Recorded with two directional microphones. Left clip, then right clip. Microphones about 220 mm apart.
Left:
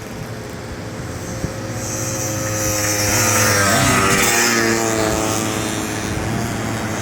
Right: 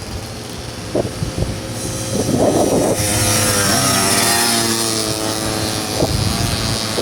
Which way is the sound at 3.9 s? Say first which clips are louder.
Left 1 dB; 45° right (ahead or behind).